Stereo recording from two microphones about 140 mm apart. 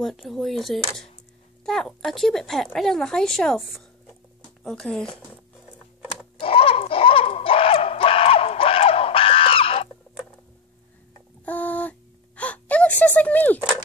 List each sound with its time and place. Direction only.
0.0 s speech: centre (ahead or behind)
6.4 s dog: 40° left (ahead or behind)
11.4 s a sound: 10° left (ahead or behind)
12.4 s whimper: 10° left (ahead or behind)